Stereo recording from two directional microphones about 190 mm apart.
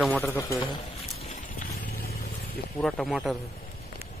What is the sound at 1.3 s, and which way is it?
Vehicle, 40° left (ahead or behind).